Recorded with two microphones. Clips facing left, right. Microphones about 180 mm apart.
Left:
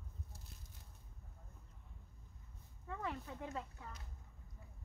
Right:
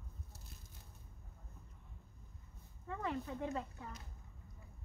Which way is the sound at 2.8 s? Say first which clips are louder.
Right 4 dB; 5° left (ahead or behind).